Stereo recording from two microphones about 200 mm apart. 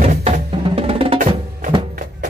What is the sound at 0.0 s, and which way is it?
Music, 30° right (ahead or behind).